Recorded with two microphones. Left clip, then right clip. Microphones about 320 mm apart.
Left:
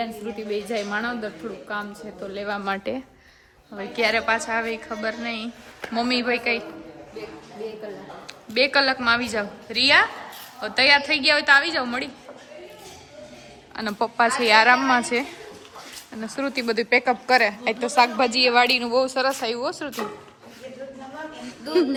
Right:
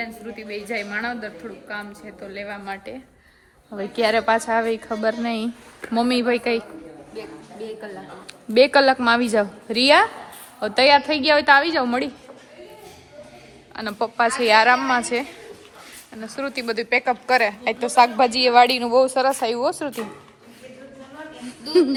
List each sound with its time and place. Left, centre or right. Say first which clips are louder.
0.0 s a woman's voice: left 2 dB; centre
2.6 s speech: left 5 dB; left
3.7 s a woman's voice: right 2 dB; centre
8.5 s a woman's voice: right 5 dB; centre
13.7 s a woman's voice: even; centre
21.4 s a woman's voice: right 4 dB; centre